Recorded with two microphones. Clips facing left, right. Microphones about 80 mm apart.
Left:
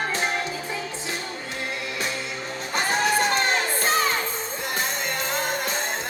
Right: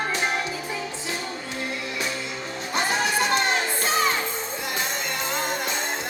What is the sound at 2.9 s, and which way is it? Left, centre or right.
Music, left.